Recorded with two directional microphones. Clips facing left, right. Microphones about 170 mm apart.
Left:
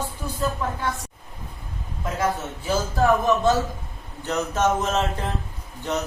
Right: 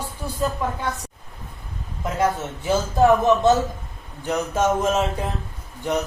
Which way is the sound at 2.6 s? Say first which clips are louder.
Right 4 dB; 20° right (ahead or behind).